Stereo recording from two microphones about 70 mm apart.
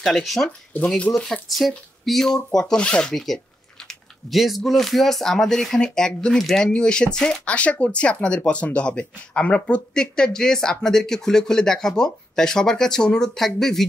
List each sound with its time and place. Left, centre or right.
0.0 s speech: centre
2.0 s speech: centre